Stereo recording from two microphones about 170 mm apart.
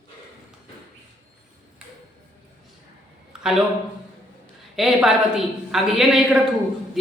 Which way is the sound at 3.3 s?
5° right (ahead or behind).